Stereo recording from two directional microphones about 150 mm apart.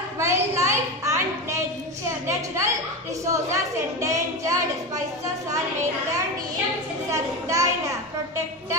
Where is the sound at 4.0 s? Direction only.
20° right (ahead or behind).